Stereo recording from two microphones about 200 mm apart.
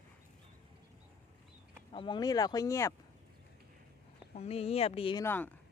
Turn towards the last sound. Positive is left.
turn(degrees=10)  # may be behind; listen again after turning